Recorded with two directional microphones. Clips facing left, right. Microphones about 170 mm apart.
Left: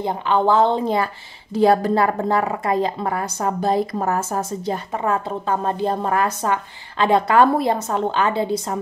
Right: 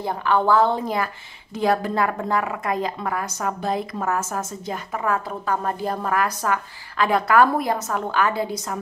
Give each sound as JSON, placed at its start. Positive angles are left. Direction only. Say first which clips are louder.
{"t": 0.0, "sound": "a woman's voice", "louder": "left 2 dB", "side_deg": 20}